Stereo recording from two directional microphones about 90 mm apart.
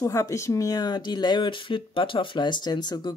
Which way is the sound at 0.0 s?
35° left (ahead or behind).